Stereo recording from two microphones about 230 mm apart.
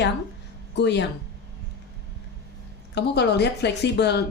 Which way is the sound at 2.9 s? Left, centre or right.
Left.